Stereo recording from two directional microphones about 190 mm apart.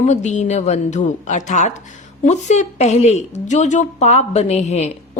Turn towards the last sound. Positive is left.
turn(degrees=35)  # may be behind; listen again after turning